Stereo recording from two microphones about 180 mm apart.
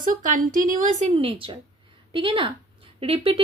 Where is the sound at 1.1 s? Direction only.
30° right (ahead or behind).